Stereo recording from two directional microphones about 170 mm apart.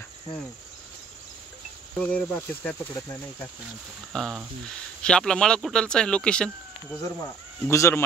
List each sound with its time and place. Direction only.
2.0 s speech: 5° left (ahead or behind)
4.1 s speech: centre (ahead or behind)
7.0 s speech: 15° left (ahead or behind)